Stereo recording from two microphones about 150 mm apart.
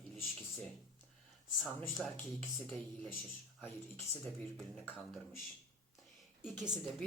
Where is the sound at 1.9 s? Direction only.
Centre (ahead or behind).